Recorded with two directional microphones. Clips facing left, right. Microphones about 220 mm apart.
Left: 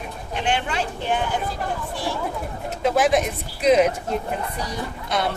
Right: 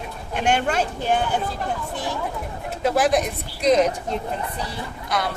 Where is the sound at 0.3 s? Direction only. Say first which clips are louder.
Right 3 dB; 45° right (ahead or behind).